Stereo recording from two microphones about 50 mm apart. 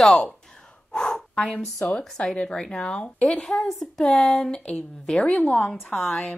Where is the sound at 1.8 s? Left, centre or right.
Centre.